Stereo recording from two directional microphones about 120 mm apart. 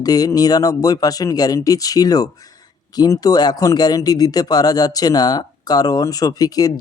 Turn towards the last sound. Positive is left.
turn(degrees=30)  # may be behind; listen again after turning